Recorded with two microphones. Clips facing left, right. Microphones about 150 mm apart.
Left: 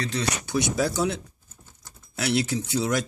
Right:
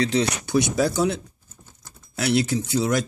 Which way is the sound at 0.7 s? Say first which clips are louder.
Right 3 dB; 40° right (ahead or behind).